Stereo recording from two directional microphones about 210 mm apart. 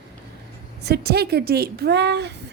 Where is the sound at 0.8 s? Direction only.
50° right (ahead or behind).